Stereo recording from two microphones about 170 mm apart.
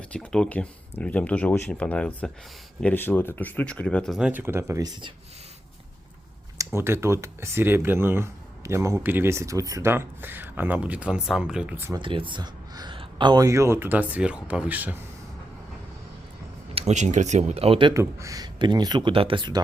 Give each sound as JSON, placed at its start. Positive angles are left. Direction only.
{"t": 0.1, "sound": "speech", "side_deg": 5}
{"t": 6.7, "sound": "speech", "side_deg": -15}
{"t": 11.9, "sound": "speech", "side_deg": -30}
{"t": 16.7, "sound": "speech", "side_deg": -40}
{"t": 17.9, "sound": "speech", "side_deg": -15}